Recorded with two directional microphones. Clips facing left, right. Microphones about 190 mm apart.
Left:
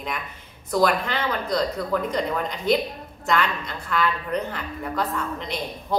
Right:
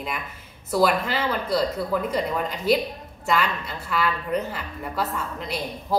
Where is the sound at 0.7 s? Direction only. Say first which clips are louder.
Even; 5° right (ahead or behind).